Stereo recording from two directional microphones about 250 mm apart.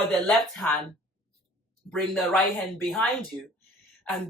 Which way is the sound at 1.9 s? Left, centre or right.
Centre.